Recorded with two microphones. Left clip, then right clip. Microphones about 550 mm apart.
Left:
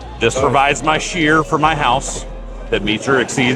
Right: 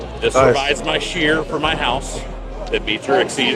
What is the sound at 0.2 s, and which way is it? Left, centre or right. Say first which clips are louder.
Speech: left 1 dB; left.